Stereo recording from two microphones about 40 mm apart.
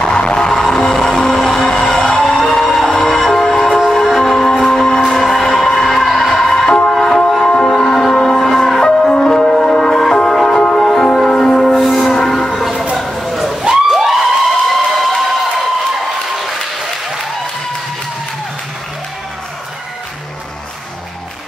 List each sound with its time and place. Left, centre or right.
0.0 s music: left
0.5 s music: centre
7.7 s music: centre
11.6 s music: centre
12.9 s a sound: centre
14.7 s a sound: centre
16.3 s applause: centre